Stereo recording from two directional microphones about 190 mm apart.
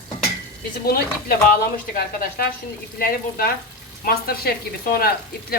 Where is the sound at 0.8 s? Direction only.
50° left (ahead or behind).